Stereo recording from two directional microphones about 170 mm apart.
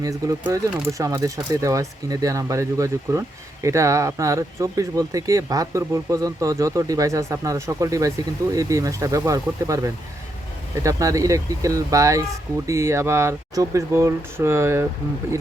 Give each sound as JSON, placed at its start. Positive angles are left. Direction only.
{"t": 0.0, "sound": "speech", "side_deg": -20}